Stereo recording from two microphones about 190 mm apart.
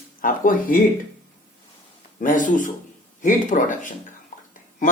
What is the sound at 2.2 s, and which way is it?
Speech, 45° left (ahead or behind).